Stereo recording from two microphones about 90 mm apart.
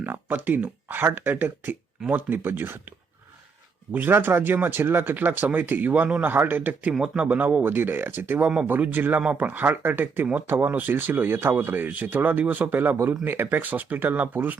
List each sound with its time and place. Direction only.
0.0 s speech: 20° right (ahead or behind)
3.9 s speech: 25° right (ahead or behind)
6.9 s speech: 5° right (ahead or behind)
7.2 s speech: 20° right (ahead or behind)